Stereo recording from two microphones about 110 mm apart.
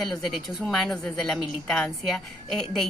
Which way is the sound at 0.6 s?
5° left (ahead or behind).